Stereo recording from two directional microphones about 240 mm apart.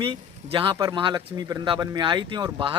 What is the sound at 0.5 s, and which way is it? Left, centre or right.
Speech, right.